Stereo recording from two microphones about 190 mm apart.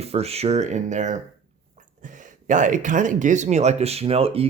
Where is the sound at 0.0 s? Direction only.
30° right (ahead or behind).